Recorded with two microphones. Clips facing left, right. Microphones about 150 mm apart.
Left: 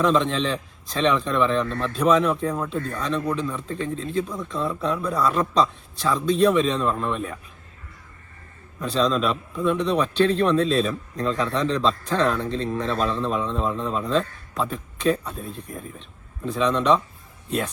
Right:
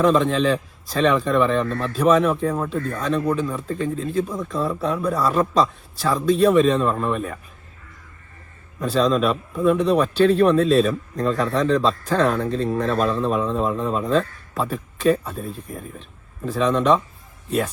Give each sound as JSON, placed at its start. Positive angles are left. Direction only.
{"t": 0.0, "sound": "speech", "side_deg": -5}
{"t": 1.6, "sound": "speech", "side_deg": -40}
{"t": 1.9, "sound": "speech", "side_deg": -5}
{"t": 8.8, "sound": "speech", "side_deg": -5}